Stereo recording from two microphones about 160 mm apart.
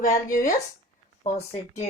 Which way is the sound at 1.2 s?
40° left (ahead or behind).